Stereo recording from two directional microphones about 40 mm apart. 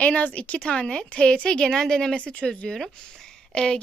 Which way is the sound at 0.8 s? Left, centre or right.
Left.